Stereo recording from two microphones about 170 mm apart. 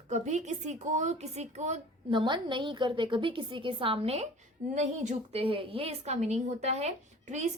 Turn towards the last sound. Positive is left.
turn(degrees=-40)  # may be behind; listen again after turning